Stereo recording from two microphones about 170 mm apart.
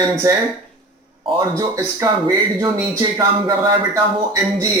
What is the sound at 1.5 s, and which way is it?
Speech, 20° right (ahead or behind).